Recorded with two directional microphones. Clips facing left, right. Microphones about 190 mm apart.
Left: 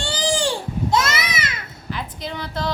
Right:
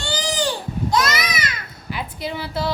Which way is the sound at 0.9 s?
25° left (ahead or behind).